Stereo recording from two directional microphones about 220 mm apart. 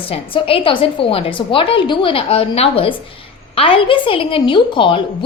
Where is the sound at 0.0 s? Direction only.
25° left (ahead or behind).